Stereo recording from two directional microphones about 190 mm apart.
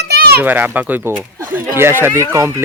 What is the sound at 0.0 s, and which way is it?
Children playing, 55° right (ahead or behind).